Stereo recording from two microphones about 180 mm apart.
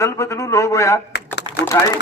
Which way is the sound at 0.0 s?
15° left (ahead or behind).